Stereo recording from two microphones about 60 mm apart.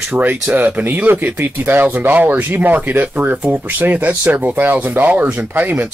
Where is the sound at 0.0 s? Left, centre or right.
Right.